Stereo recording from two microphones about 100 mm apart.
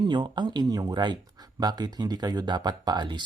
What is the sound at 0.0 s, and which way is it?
Speech, 50° right (ahead or behind).